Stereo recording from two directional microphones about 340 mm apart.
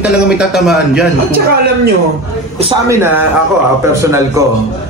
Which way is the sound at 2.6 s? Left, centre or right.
Centre.